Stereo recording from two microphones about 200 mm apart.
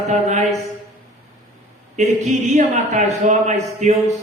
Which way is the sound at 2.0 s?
35° right (ahead or behind).